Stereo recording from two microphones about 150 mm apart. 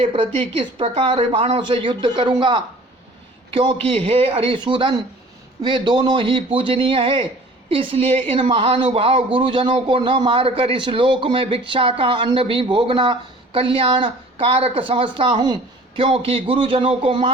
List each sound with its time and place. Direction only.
0.0 s a woman's voice: 45° right (ahead or behind)